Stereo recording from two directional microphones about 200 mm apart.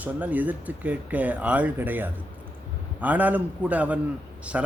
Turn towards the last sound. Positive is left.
turn(degrees=-5)  # may be behind; listen again after turning